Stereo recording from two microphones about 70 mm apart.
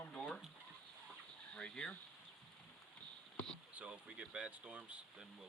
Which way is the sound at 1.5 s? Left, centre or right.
Centre.